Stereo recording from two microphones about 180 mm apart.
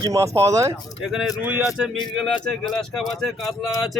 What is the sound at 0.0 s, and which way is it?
Speech, 20° right (ahead or behind).